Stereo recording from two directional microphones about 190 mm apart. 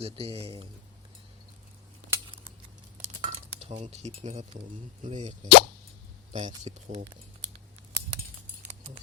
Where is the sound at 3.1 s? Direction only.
30° right (ahead or behind).